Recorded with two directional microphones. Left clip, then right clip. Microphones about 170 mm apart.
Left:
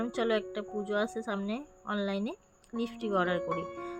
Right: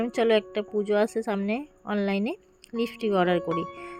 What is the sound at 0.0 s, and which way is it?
A woman's voice, 35° right (ahead or behind).